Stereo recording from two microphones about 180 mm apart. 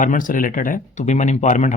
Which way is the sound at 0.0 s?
45° left (ahead or behind).